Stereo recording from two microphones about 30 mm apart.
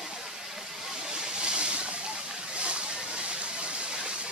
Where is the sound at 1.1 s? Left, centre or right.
Right.